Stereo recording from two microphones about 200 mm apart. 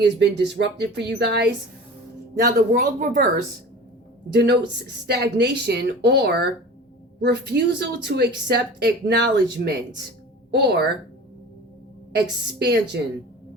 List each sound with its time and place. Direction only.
0.0 s speech: 60° right (ahead or behind)
2.3 s speech: 40° right (ahead or behind)
4.3 s speech: 55° right (ahead or behind)
12.1 s speech: 55° right (ahead or behind)